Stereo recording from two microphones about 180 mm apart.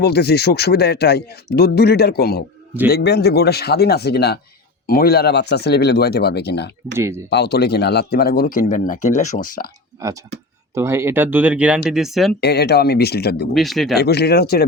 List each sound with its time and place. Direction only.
0.0 s speech: 65° left (ahead or behind)
6.9 s speech: 15° right (ahead or behind)
7.3 s speech: 65° left (ahead or behind)
10.0 s speech: 20° right (ahead or behind); by 12.4 s centre (ahead or behind)
12.4 s speech: 65° left (ahead or behind)
13.5 s speech: centre (ahead or behind)
13.9 s speech: 65° left (ahead or behind)